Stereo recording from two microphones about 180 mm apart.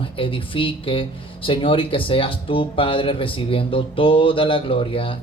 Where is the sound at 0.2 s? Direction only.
30° left (ahead or behind).